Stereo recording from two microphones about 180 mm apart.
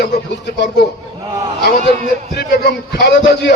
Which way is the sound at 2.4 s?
65° left (ahead or behind).